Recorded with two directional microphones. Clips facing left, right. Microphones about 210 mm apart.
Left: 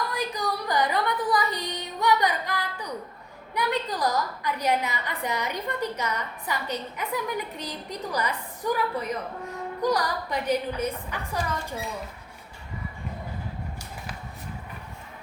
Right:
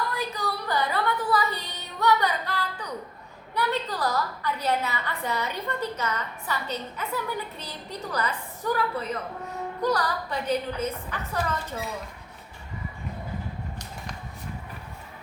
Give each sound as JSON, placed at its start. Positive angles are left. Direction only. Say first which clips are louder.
{"t": 0.1, "sound": "a sound", "louder": "left 1 dB", "side_deg": 15}
{"t": 2.0, "sound": "music", "louder": "even", "side_deg": 15}
{"t": 3.5, "sound": "a woman's voice", "louder": "even", "side_deg": 15}